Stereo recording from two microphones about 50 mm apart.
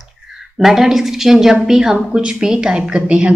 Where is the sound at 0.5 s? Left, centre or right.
Centre.